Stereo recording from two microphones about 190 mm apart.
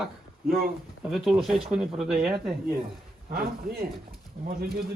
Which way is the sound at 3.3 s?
55° right (ahead or behind).